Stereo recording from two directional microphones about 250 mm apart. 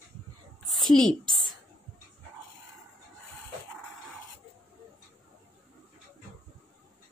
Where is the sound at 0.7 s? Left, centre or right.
Centre.